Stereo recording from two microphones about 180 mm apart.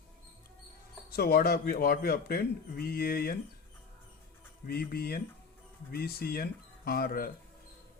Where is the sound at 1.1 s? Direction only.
60° left (ahead or behind).